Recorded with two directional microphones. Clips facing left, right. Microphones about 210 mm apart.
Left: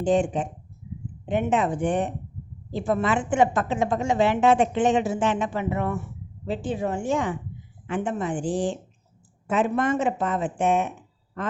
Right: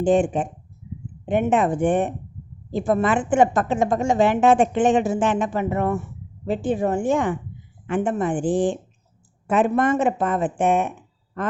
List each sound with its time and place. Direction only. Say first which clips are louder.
0.0 s a woman's voice: right 3 dB; 55° right (ahead or behind)